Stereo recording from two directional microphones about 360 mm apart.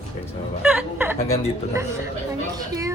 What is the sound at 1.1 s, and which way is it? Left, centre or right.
Speech, centre.